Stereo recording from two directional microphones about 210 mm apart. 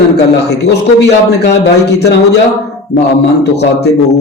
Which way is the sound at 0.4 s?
50° left (ahead or behind).